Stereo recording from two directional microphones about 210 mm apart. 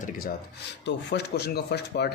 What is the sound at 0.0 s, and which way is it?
Speech, 45° left (ahead or behind).